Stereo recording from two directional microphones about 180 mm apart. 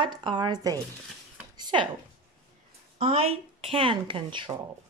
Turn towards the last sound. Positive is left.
turn(degrees=-25)  # may be behind; listen again after turning